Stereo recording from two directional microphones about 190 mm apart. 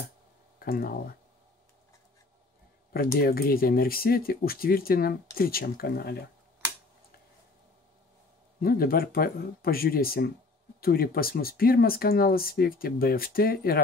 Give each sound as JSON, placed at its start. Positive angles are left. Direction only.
{"t": 0.7, "sound": "speech", "side_deg": 50}
{"t": 3.2, "sound": "speech", "side_deg": 50}
{"t": 8.5, "sound": "speech", "side_deg": 50}